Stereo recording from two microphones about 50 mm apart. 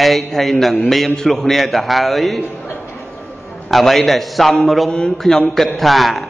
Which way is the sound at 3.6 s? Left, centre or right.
Centre.